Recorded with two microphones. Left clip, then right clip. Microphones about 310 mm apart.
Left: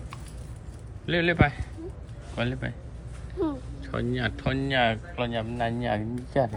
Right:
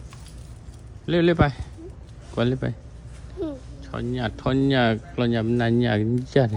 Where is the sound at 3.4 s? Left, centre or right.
Centre.